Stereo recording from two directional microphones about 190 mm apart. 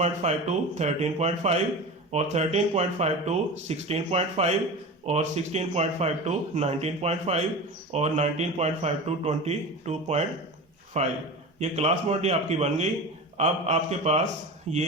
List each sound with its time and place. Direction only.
0.0 s a man's voice: 35° right (ahead or behind)